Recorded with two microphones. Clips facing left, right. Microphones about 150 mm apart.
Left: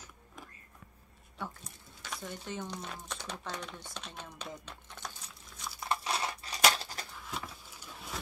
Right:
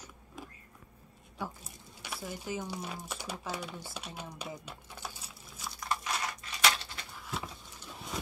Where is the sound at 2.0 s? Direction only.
10° right (ahead or behind).